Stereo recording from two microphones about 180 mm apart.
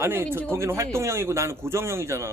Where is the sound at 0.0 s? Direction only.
15° right (ahead or behind).